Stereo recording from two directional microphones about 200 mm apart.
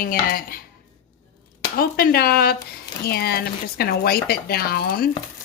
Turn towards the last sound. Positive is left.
turn(degrees=50)  # may be behind; listen again after turning